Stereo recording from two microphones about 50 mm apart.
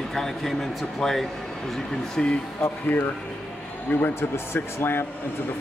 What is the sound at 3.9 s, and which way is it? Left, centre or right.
Speech, left.